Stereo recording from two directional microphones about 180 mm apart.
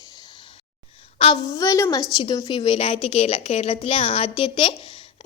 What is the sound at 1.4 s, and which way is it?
A woman's voice, 20° left (ahead or behind).